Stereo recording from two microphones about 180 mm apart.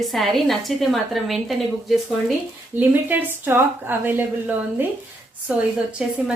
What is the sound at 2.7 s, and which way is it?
A woman's voice, 10° right (ahead or behind).